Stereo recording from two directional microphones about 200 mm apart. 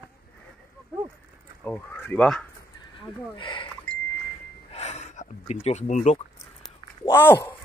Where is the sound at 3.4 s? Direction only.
25° left (ahead or behind).